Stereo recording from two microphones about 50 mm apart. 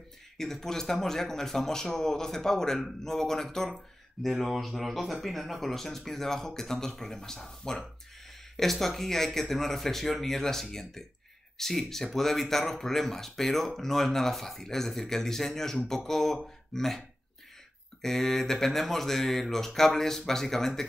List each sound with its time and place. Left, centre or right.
0.4 s speech: centre
3.7 s speech: centre
18.0 s speech: centre